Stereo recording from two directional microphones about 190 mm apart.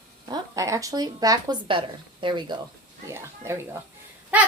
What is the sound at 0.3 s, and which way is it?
Speech, 15° right (ahead or behind).